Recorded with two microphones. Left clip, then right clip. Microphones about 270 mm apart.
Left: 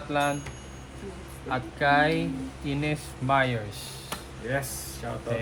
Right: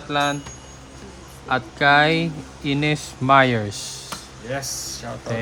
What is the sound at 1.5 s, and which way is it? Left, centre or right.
Speech, right.